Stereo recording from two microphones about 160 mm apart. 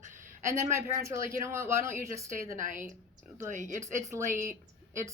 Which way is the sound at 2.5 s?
55° right (ahead or behind).